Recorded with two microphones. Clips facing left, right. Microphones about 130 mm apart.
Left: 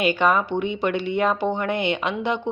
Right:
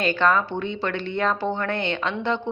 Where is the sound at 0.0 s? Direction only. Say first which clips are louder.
Left 1 dB; 10° left (ahead or behind).